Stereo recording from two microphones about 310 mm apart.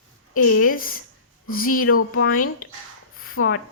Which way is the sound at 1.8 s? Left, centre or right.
Left.